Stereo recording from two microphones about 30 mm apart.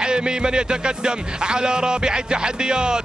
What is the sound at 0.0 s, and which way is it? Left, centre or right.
Speech, right.